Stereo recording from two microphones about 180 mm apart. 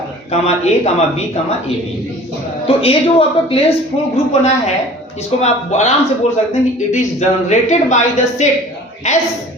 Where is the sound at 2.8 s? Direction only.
30° left (ahead or behind).